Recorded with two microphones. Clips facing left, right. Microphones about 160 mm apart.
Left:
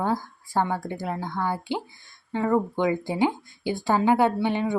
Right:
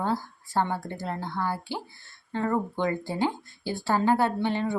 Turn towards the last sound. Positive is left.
turn(degrees=15)  # may be behind; listen again after turning